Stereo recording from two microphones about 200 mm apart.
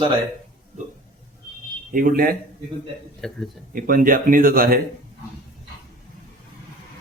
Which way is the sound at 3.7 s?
45° right (ahead or behind).